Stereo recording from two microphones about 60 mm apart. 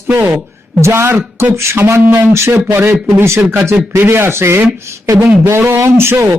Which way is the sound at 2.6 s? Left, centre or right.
Right.